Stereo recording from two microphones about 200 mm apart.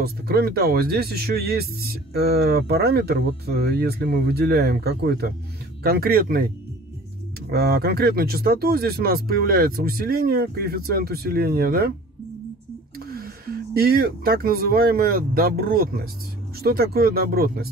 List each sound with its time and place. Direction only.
0.0 s speech: 50° right (ahead or behind)
7.5 s speech: 50° right (ahead or behind)
13.7 s speech: 50° right (ahead or behind)